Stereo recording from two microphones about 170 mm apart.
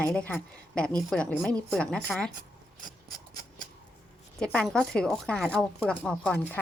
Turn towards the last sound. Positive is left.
turn(degrees=10)  # may be behind; listen again after turning